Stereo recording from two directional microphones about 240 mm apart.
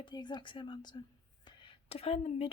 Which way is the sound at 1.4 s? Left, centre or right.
Left.